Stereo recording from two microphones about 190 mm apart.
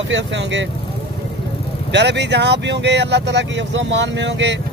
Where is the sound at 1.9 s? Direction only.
65° right (ahead or behind).